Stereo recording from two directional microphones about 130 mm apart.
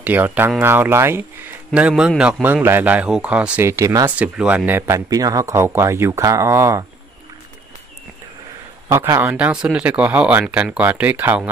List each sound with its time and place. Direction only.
0.0 s a man's voice: 15° right (ahead or behind)
1.7 s a man's voice: 10° right (ahead or behind)
3.6 s speech: 20° right (ahead or behind)
4.2 s speech: 10° right (ahead or behind)
8.8 s speech: 20° right (ahead or behind)
9.3 s a man's voice: 10° right (ahead or behind)